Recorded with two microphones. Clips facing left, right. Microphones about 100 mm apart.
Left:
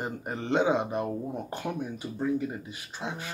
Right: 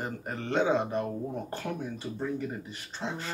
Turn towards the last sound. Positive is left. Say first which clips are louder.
# right 1 dB
turn(degrees=15)  # may be behind; listen again after turning